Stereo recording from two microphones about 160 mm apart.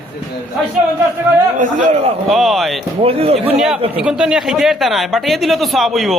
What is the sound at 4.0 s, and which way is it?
A man's voice, 5° right (ahead or behind).